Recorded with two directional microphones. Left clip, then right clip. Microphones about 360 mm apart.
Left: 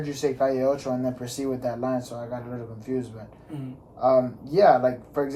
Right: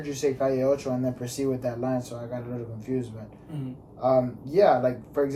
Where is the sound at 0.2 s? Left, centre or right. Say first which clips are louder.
Left 1 dB; centre.